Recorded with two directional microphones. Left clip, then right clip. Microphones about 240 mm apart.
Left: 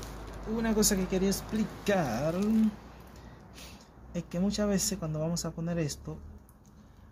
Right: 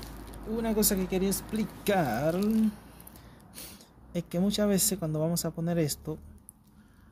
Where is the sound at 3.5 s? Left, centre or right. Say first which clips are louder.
Right 4 dB; right.